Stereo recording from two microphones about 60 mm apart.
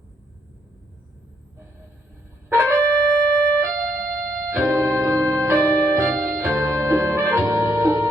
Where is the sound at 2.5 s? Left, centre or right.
Right.